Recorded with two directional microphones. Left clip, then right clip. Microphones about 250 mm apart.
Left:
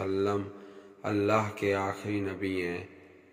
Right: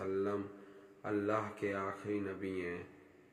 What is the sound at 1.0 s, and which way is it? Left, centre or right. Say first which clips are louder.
A man's voice: left 8 dB; left.